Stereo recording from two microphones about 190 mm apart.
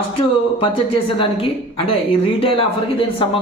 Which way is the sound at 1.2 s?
30° left (ahead or behind).